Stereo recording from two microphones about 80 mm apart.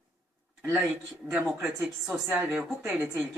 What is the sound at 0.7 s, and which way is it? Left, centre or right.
Speech, centre.